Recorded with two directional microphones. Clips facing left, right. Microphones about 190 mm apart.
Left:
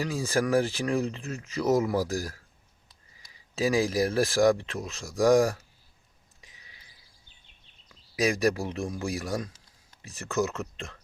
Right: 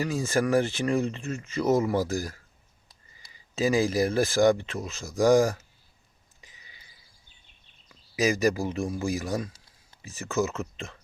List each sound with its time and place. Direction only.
0.0 s speech: centre (ahead or behind)
6.4 s a sound: centre (ahead or behind)
7.9 s speech: centre (ahead or behind)